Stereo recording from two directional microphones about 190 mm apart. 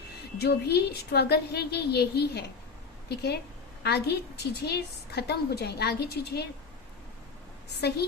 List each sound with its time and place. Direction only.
0.3 s a woman's voice: 60° left (ahead or behind)
7.8 s a woman's voice: 60° left (ahead or behind)